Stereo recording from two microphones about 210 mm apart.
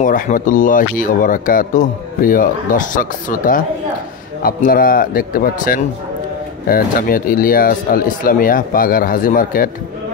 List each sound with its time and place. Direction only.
0.0 s speech: 40° left (ahead or behind)